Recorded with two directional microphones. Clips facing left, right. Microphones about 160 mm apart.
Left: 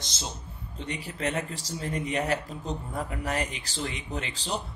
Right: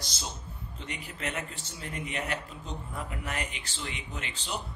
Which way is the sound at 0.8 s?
35° left (ahead or behind).